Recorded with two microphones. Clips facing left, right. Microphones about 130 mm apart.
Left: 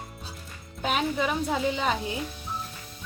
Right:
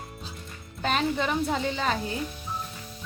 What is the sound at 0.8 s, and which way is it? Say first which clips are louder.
A woman's voice: even; 5° left (ahead or behind).